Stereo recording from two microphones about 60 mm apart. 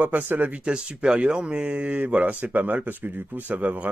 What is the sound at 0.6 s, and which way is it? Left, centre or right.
Speech, centre.